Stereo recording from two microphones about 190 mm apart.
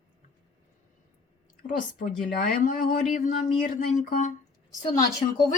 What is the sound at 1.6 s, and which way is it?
Speech, 45° left (ahead or behind).